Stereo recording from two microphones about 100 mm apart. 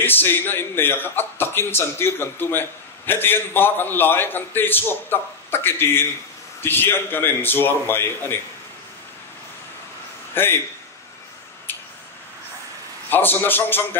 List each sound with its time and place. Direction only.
0.0 s a man's voice: 20° left (ahead or behind)
10.3 s a man's voice: 20° left (ahead or behind)
13.1 s a man's voice: 20° left (ahead or behind)